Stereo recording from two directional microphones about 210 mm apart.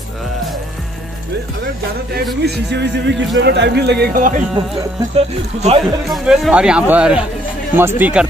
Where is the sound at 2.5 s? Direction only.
55° right (ahead or behind).